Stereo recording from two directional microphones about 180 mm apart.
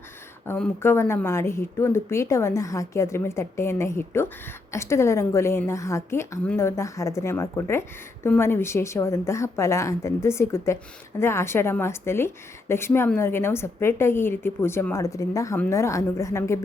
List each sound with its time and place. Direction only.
0.4 s a woman's voice: 10° left (ahead or behind)